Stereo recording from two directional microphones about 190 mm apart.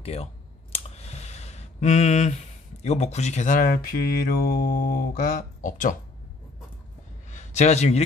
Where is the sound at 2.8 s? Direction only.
35° left (ahead or behind).